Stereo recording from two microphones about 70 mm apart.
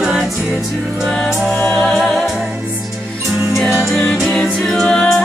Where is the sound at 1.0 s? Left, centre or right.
Centre.